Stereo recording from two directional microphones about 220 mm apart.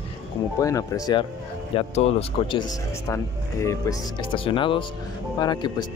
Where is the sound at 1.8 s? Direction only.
25° left (ahead or behind).